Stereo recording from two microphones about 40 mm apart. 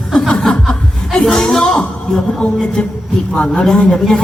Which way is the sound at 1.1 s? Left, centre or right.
Centre.